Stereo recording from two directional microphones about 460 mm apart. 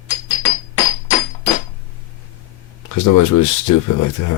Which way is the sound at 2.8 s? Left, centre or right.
Left.